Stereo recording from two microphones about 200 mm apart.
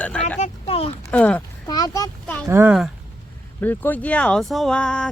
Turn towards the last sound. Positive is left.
turn(degrees=5)  # may be behind; listen again after turning